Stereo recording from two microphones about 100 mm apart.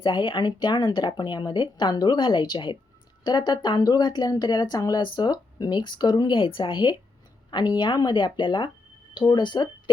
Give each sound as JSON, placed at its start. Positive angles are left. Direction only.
{"t": 0.0, "sound": "speech", "side_deg": 50}